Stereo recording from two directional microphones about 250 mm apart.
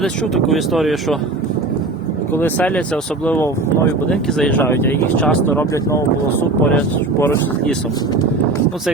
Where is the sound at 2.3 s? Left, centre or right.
Centre.